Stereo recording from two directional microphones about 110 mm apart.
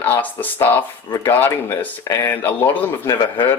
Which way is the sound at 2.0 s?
30° left (ahead or behind).